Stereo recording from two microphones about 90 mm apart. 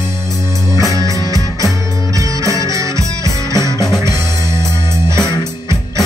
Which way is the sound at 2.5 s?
35° right (ahead or behind).